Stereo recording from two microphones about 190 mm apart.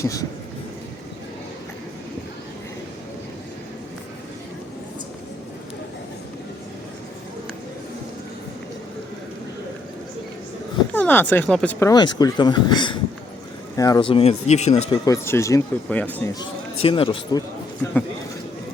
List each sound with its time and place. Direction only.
0.0 s speech: 15° left (ahead or behind)
10.9 s speech: 10° left (ahead or behind)
11.9 s speech: 20° left (ahead or behind)
15.0 s speech: 15° left (ahead or behind)
16.8 s speech: 25° left (ahead or behind)